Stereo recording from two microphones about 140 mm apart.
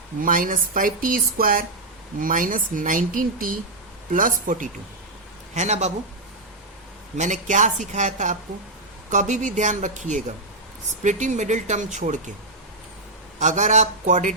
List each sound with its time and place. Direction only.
0.2 s speech: 75° right (ahead or behind)
2.1 s speech: 75° right (ahead or behind)
4.1 s speech: 70° right (ahead or behind)
5.5 s speech: 55° right (ahead or behind)
7.2 s speech: 60° right (ahead or behind)
13.4 s speech: 60° right (ahead or behind)